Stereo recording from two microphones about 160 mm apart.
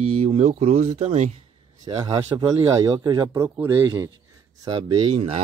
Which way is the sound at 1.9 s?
30° right (ahead or behind).